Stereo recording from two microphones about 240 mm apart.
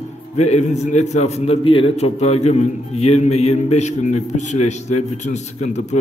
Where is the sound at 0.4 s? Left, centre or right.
Left.